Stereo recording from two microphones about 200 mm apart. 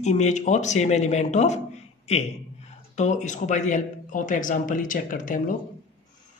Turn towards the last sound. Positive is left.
turn(degrees=40)  # may be behind; listen again after turning